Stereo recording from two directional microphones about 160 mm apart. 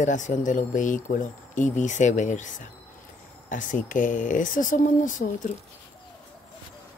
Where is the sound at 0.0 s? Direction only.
50° left (ahead or behind).